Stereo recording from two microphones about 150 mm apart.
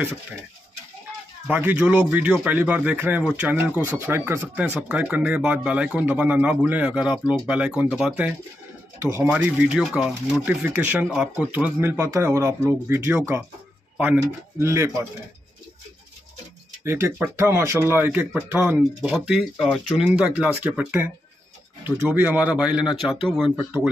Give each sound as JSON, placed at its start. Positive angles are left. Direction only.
{"t": 1.5, "sound": "a man's voice", "side_deg": -10}
{"t": 16.8, "sound": "a man's voice", "side_deg": -15}